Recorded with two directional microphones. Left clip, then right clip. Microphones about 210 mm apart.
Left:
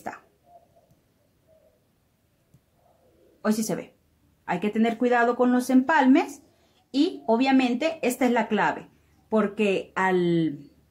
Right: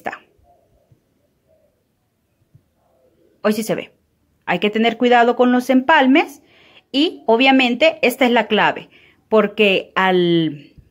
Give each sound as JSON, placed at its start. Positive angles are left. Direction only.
{"t": 3.4, "sound": "a woman's voice", "side_deg": -30}